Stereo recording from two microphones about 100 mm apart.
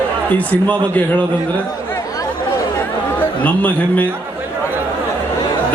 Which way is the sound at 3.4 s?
15° left (ahead or behind).